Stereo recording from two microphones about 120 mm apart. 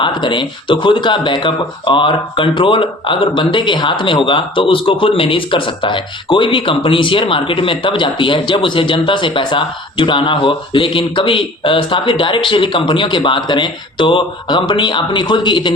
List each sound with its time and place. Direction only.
0.0 s speech: 40° left (ahead or behind)